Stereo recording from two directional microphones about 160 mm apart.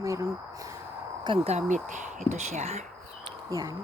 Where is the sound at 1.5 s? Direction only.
45° right (ahead or behind).